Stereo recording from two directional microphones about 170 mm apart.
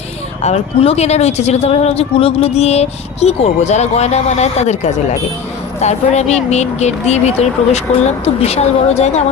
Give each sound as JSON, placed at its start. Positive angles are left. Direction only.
{"t": 0.4, "sound": "speech", "side_deg": 35}